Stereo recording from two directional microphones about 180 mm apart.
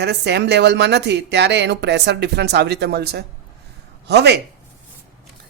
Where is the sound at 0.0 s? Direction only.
70° right (ahead or behind).